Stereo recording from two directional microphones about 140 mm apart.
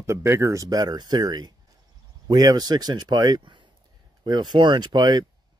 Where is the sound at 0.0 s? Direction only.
20° right (ahead or behind).